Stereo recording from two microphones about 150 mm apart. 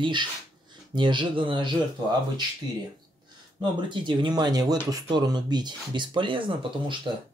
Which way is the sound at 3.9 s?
30° right (ahead or behind).